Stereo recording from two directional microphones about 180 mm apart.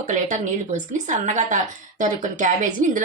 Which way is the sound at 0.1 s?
45° right (ahead or behind).